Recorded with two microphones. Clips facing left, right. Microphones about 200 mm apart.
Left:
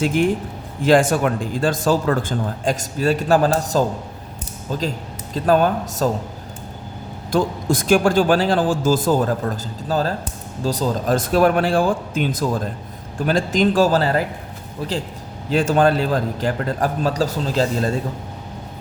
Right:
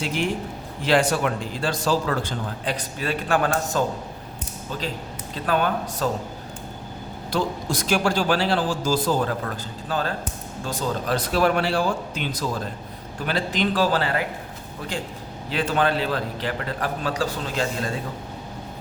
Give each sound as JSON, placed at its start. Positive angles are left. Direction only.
{"t": 0.0, "sound": "a man's voice", "side_deg": 50}
{"t": 7.3, "sound": "speech", "side_deg": 50}
{"t": 9.9, "sound": "a man's voice", "side_deg": 40}
{"t": 15.4, "sound": "a man's voice", "side_deg": 45}